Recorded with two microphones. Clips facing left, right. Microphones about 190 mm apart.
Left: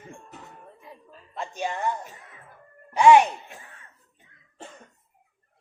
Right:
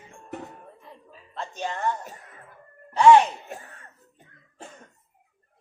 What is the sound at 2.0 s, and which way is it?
Speech, 40° right (ahead or behind).